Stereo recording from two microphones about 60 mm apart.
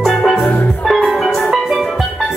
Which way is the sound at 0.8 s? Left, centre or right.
Centre.